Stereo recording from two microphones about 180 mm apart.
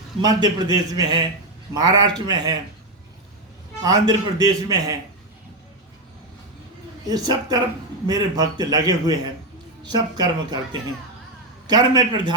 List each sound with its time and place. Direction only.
0.2 s a man's voice: 25° right (ahead or behind)
3.8 s a man's voice: 20° right (ahead or behind)
7.1 s a man's voice: 20° right (ahead or behind)
11.7 s a man's voice: 25° right (ahead or behind)